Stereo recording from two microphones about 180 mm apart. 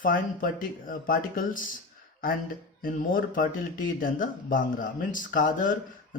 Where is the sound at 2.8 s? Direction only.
50° left (ahead or behind).